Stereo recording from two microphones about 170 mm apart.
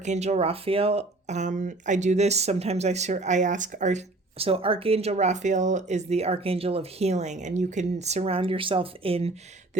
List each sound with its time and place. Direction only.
0.0 s speech: 40° right (ahead or behind)